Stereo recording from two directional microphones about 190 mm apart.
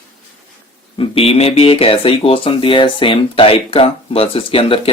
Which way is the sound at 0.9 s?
30° left (ahead or behind).